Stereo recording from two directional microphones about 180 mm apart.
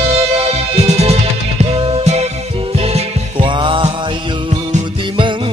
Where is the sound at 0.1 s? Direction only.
35° right (ahead or behind).